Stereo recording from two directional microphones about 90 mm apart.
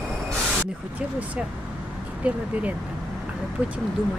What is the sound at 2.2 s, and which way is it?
Speech, 15° right (ahead or behind).